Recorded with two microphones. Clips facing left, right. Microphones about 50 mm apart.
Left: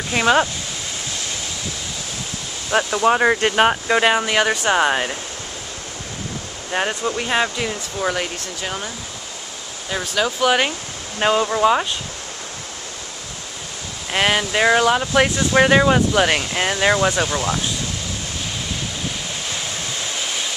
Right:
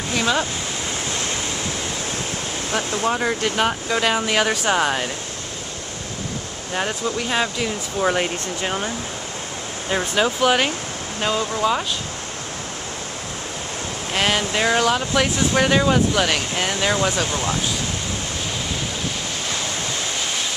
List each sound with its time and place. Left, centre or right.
0.1 s speech: left
2.7 s speech: left
4.2 s speech: centre
6.7 s speech: centre
8.0 s speech: centre
10.2 s speech: centre
11.1 s speech: left
14.1 s speech: centre